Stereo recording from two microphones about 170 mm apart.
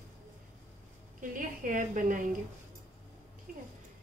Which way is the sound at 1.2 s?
50° right (ahead or behind).